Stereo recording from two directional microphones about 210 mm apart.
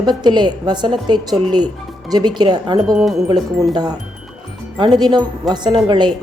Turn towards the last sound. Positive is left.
turn(degrees=-20)  # may be behind; listen again after turning